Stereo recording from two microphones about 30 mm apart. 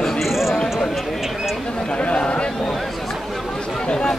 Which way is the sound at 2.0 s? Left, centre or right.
Left.